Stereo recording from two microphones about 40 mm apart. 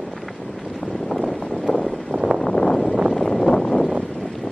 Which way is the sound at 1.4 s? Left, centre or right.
Centre.